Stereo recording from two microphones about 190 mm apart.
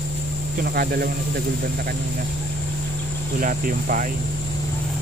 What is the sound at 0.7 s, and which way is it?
Speech, 55° right (ahead or behind).